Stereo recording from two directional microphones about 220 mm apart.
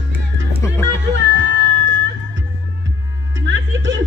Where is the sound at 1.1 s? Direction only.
50° right (ahead or behind).